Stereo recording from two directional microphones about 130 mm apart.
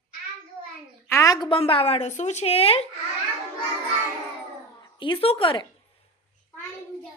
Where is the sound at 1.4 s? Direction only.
45° left (ahead or behind).